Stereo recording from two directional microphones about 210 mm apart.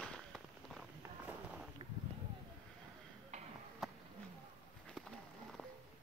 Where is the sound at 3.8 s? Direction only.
Centre (ahead or behind).